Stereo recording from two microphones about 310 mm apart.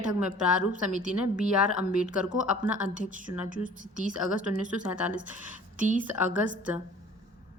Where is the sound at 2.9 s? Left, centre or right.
Right.